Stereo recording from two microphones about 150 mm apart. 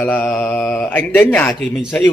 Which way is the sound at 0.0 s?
10° left (ahead or behind).